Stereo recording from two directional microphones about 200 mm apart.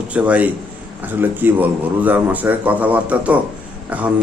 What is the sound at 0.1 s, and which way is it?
Speech, 5° right (ahead or behind).